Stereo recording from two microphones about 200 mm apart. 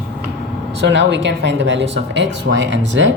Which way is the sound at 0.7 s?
60° right (ahead or behind).